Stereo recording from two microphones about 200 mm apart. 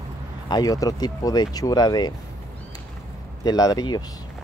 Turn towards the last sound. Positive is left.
turn(degrees=20)  # may be behind; listen again after turning